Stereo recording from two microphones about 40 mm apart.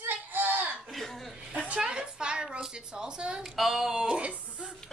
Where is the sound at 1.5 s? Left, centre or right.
Right.